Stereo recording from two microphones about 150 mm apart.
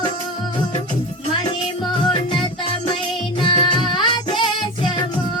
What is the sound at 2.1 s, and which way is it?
Music, 30° left (ahead or behind).